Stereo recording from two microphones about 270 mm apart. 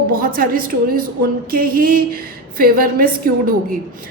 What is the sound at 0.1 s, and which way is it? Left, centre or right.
A woman's voice, right.